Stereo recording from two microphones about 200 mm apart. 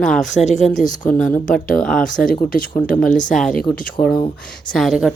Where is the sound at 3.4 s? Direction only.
Centre (ahead or behind).